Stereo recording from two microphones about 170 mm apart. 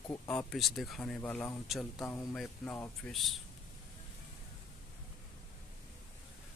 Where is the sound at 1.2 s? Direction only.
10° left (ahead or behind).